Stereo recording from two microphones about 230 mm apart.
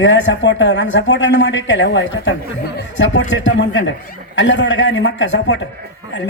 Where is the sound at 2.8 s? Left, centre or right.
Left.